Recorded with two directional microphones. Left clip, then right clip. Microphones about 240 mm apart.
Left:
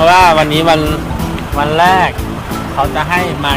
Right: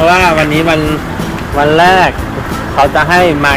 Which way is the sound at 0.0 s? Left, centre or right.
Centre.